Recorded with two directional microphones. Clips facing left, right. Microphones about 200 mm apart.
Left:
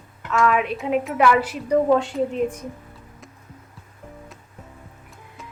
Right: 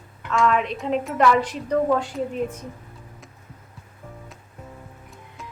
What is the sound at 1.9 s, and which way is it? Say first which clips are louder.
Speech: left 4 dB; 25° left (ahead or behind).